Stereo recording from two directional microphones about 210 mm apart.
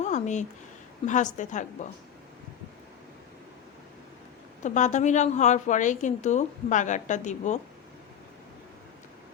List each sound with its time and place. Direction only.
0.0 s a sound: 35° left (ahead or behind)
1.0 s a woman's voice: 35° left (ahead or behind)
4.6 s a woman's voice: 35° left (ahead or behind)